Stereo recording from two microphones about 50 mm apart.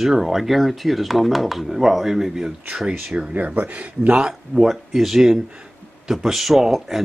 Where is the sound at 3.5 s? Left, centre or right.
Right.